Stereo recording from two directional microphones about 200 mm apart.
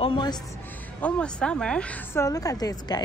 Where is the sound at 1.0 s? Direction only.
5° left (ahead or behind).